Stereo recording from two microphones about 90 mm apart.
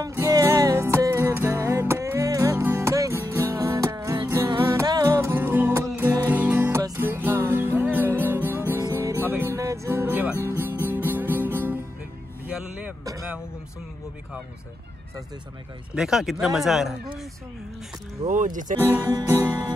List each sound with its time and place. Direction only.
0.1 s music: 35° right (ahead or behind)
5.3 s music: 25° right (ahead or behind)
12.4 s vehicle: 15° right (ahead or behind)
15.9 s speech: 5° right (ahead or behind)
18.2 s speech: 55° right (ahead or behind)
19.2 s music: 25° right (ahead or behind)